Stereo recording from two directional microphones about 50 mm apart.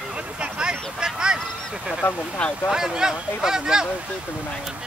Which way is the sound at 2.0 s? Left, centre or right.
Left.